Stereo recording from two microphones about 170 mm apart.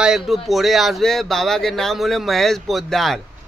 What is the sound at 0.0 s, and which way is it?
Speech, centre (ahead or behind).